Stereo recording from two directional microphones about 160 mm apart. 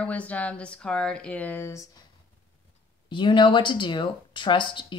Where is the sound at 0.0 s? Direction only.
10° left (ahead or behind).